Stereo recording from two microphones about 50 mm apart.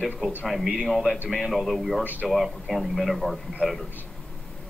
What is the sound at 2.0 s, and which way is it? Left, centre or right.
Speech, right.